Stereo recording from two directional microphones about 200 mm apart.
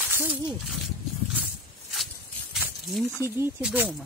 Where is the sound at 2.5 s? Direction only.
Centre (ahead or behind).